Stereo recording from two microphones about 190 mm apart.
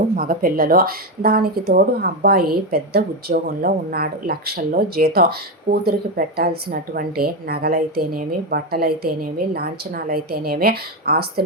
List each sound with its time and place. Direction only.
0.2 s speech: 50° right (ahead or behind)